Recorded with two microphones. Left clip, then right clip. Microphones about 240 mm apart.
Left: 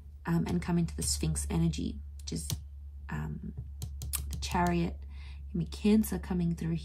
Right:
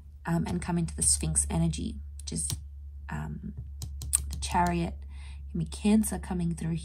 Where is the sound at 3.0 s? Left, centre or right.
Right.